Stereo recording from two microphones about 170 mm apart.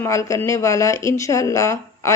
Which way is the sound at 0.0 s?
15° left (ahead or behind).